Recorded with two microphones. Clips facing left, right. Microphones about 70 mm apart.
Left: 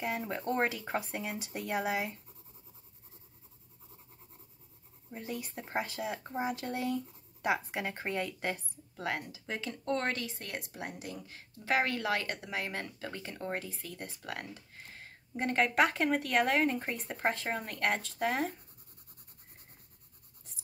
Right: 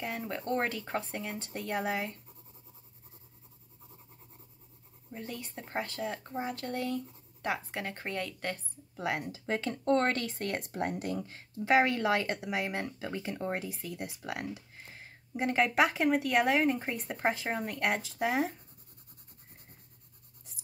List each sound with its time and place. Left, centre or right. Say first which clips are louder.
0.0 s speech: left 1 dB; centre
5.1 s speech: left 1 dB; centre
8.9 s speech: right 2 dB; centre
9.3 s speech: right 6 dB; right
11.6 s speech: right 5 dB; right; by 18.5 s centre